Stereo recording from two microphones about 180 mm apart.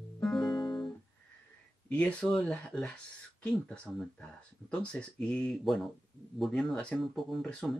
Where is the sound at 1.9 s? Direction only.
5° left (ahead or behind).